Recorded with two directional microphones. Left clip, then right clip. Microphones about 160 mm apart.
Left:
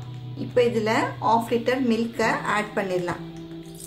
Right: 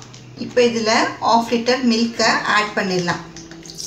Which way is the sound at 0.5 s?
70° left (ahead or behind).